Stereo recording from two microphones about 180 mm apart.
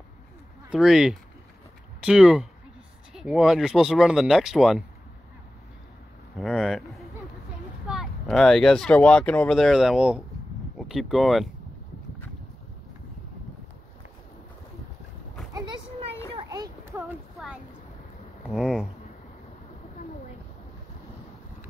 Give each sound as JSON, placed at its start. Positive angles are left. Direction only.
{"t": 0.7, "sound": "speech", "side_deg": 0}
{"t": 6.3, "sound": "speech", "side_deg": 0}
{"t": 16.3, "sound": "a sound", "side_deg": -20}
{"t": 18.5, "sound": "speech", "side_deg": 0}